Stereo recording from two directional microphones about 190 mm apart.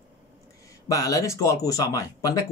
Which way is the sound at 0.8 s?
15° left (ahead or behind).